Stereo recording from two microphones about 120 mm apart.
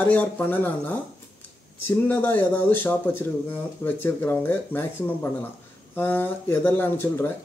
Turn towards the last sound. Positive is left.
turn(degrees=15)  # may be behind; listen again after turning